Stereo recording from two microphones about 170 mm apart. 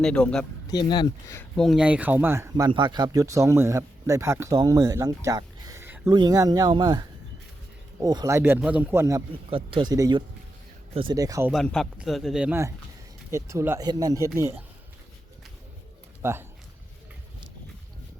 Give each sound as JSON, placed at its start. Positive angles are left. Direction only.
{"t": 0.0, "sound": "speech", "side_deg": 5}
{"t": 0.7, "sound": "speech", "side_deg": 25}
{"t": 1.4, "sound": "speech", "side_deg": 5}
{"t": 8.0, "sound": "speech", "side_deg": -20}
{"t": 9.3, "sound": "speech", "side_deg": -30}
{"t": 11.5, "sound": "speech", "side_deg": 0}
{"t": 16.2, "sound": "speech", "side_deg": -15}